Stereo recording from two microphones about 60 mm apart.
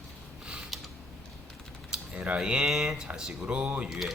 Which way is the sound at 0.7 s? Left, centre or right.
Centre.